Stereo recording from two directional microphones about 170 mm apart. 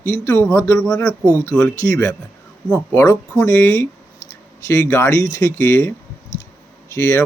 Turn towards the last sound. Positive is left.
turn(degrees=15)  # may be behind; listen again after turning